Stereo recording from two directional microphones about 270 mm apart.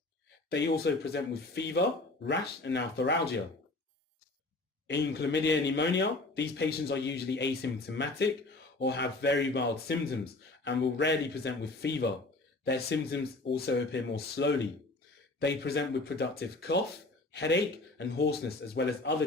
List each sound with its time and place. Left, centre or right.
0.6 s a man's voice: left
4.9 s a man's voice: left